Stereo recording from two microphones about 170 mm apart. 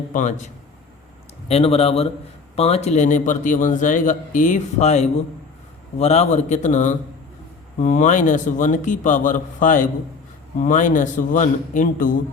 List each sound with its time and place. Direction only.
0.1 s a man's voice: 45° left (ahead or behind)